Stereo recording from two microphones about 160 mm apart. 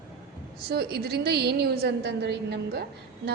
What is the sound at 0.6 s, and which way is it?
A woman's voice, 85° right.